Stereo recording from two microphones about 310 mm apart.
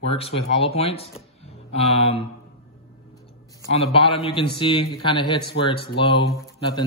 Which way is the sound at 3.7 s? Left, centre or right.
Centre.